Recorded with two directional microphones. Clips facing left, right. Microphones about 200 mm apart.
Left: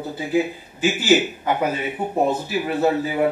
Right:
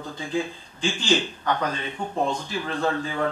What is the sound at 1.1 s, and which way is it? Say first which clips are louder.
A man's voice: left 5 dB; 10° left (ahead or behind).